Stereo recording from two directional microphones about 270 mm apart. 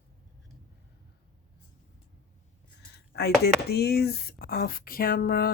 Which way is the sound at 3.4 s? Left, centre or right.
Left.